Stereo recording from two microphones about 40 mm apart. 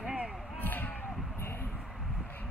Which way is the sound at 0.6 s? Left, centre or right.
Left.